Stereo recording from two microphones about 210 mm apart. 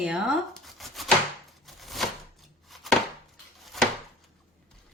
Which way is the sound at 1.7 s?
Centre (ahead or behind).